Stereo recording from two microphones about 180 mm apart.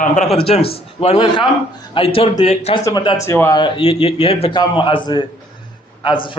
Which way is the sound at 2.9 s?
20° left (ahead or behind).